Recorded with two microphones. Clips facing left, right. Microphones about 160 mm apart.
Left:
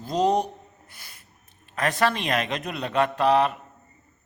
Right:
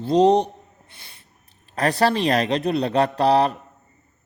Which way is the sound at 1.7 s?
35° right (ahead or behind).